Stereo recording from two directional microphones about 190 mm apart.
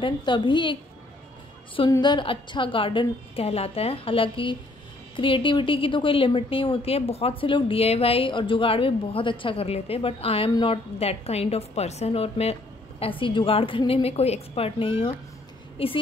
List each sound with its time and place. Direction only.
0.0 s a woman's voice: 25° left (ahead or behind)
1.8 s a woman's voice: 25° left (ahead or behind)